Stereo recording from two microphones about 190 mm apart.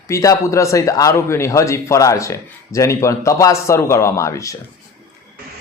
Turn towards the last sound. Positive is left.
turn(degrees=15)  # may be behind; listen again after turning